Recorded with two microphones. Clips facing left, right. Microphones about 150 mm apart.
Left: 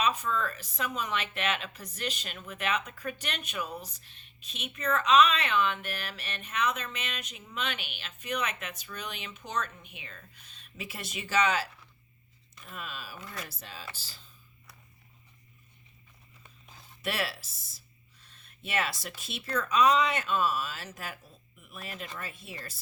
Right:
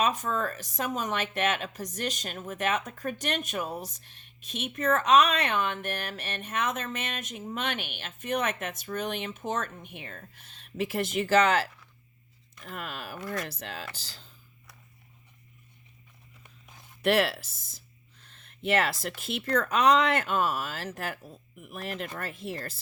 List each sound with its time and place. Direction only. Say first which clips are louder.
0.0 s speech: right 2 dB; 45° right (ahead or behind)
12.6 s speech: right 4 dB; 65° right (ahead or behind)
13.4 s speech: right 6 dB; 70° right (ahead or behind)
17.0 s speech: right 9 dB; 55° right (ahead or behind)
18.6 s speech: right 6 dB; 60° right (ahead or behind)